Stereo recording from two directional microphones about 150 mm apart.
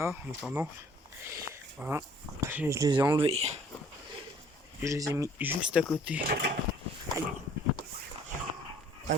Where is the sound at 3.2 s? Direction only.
45° right (ahead or behind).